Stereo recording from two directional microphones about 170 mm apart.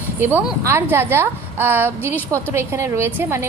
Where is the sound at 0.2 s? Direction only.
10° right (ahead or behind).